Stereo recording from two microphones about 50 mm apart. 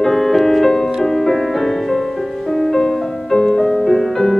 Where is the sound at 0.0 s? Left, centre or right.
Centre.